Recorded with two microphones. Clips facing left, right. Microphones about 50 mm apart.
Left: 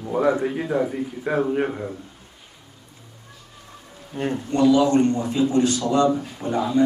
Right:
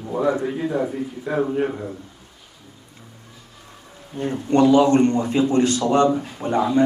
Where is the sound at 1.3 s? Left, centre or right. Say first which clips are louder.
Left 1 dB; left.